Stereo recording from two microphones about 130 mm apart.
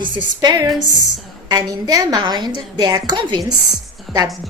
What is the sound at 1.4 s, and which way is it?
A woman's voice, 30° right (ahead or behind).